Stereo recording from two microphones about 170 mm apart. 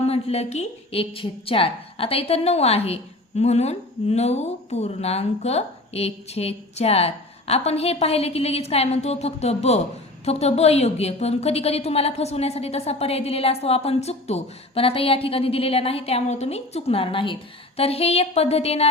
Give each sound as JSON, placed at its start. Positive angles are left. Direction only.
{"t": 0.0, "sound": "a woman's voice", "side_deg": 35}